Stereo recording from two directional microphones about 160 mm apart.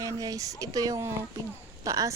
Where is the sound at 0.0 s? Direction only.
20° right (ahead or behind).